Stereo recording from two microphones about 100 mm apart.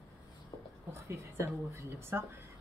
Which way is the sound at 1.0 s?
30° right (ahead or behind).